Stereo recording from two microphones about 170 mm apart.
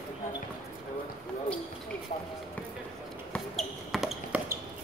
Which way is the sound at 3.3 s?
Centre (ahead or behind).